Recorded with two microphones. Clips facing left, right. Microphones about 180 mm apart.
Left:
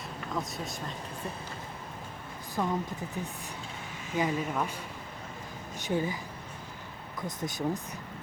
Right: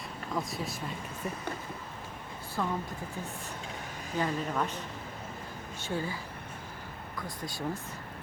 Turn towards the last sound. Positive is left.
turn(degrees=20)  # may be behind; listen again after turning